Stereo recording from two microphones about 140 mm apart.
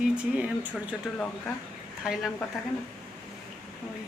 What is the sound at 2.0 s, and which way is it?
Speech, centre (ahead or behind).